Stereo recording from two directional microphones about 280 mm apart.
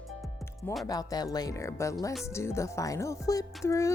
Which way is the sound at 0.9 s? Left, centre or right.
Centre.